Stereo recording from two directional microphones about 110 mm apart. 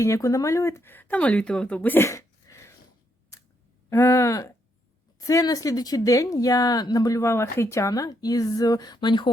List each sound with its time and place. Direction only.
0.0 s speech: 30° left (ahead or behind)
3.3 s clicking: 30° left (ahead or behind)
3.8 s a woman's voice: 20° left (ahead or behind); by 9.3 s 45° left (ahead or behind)